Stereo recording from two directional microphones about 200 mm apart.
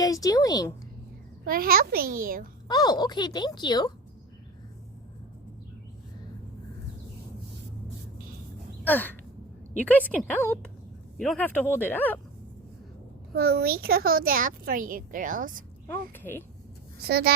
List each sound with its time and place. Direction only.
0.0 s speech: 20° left (ahead or behind)
1.5 s a woman's voice: 45° right (ahead or behind)
2.6 s speech: 20° left (ahead or behind)
8.8 s gasp: 10° left (ahead or behind)
9.8 s speech: 10° left (ahead or behind)
13.3 s a woman's voice: 50° right (ahead or behind)
15.9 s speech: 10° left (ahead or behind)
17.0 s a woman's voice: 55° right (ahead or behind)